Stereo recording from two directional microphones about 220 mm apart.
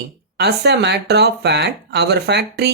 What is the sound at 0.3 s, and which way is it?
Speech, 50° right (ahead or behind).